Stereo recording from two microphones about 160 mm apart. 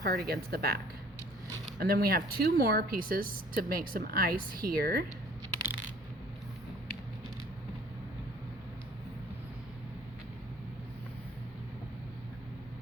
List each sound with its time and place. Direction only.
0.0 s a woman's voice: 85° right
1.8 s a woman's voice: 70° right (ahead or behind)